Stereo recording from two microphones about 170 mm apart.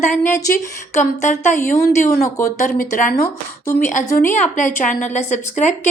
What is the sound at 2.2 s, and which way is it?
Speech, 15° left (ahead or behind).